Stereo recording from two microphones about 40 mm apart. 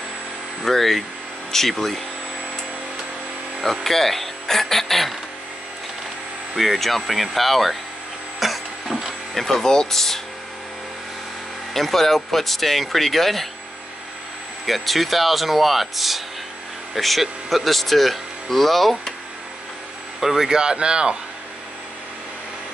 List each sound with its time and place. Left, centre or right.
0.7 s speech: centre
3.8 s speech: centre
6.5 s speech: centre
8.4 s a sound: centre
9.4 s speech: centre
11.7 s speech: centre
14.7 s speech: centre
20.2 s speech: centre